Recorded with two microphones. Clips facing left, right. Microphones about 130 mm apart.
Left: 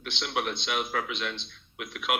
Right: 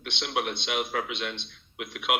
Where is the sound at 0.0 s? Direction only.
25° right (ahead or behind).